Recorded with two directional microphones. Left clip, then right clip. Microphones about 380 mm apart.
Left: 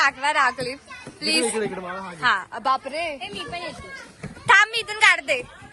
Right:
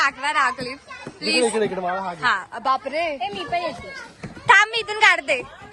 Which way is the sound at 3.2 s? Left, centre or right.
Right.